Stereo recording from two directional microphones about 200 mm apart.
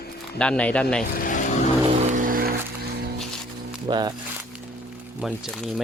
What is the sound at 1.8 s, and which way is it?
Music, 35° right (ahead or behind).